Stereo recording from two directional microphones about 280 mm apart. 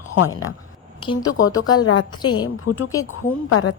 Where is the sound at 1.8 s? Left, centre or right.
Left.